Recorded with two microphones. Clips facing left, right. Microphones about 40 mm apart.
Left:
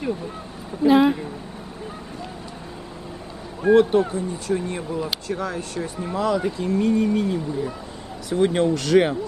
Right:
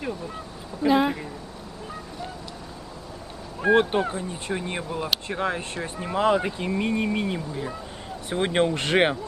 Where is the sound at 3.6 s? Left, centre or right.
Right.